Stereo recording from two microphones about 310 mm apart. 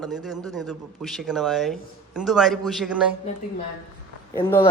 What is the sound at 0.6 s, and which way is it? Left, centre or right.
A man's voice, centre.